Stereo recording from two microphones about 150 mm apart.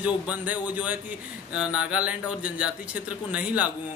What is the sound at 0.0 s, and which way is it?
A man's voice, 10° right (ahead or behind).